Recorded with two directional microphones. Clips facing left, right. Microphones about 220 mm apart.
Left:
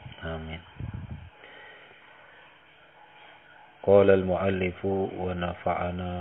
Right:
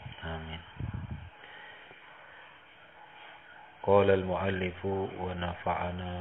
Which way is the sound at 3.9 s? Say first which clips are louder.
Left 6 dB; 60° left (ahead or behind).